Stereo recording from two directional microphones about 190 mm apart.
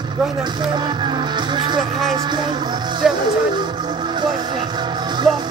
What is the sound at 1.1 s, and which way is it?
Music, 25° right (ahead or behind).